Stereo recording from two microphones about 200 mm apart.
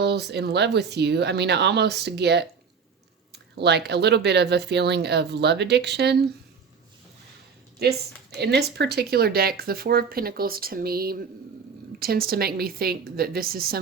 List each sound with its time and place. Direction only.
0.0 s speech: 55° right (ahead or behind)
7.8 s speech: 55° right (ahead or behind)